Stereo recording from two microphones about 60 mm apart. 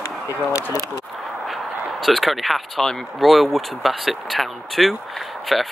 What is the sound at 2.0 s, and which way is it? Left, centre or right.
Speech, centre.